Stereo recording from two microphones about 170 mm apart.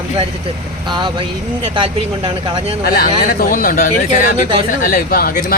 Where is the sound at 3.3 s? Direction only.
60° left (ahead or behind).